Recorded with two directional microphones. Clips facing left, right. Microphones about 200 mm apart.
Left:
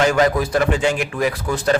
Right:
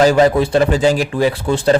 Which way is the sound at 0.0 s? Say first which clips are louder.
Right 5 dB; 30° right (ahead or behind).